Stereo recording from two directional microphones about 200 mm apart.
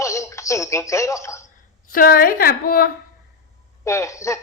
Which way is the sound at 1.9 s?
45° left (ahead or behind).